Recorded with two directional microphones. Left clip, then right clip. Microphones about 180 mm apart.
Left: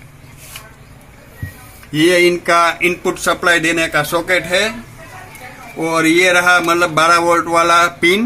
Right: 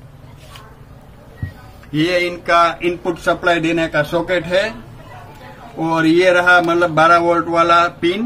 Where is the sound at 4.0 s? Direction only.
40° left (ahead or behind).